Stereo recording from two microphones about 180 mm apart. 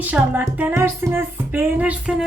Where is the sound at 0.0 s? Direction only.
10° right (ahead or behind).